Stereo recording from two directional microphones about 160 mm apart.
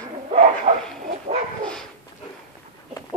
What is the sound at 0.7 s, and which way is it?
Bow-wow, 40° right (ahead or behind).